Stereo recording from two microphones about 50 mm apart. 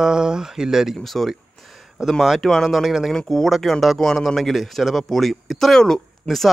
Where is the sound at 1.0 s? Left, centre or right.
Centre.